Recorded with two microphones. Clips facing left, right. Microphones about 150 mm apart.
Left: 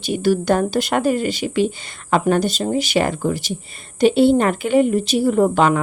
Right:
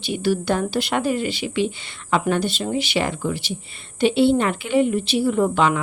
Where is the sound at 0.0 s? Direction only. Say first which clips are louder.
Left 4 dB; 45° left (ahead or behind).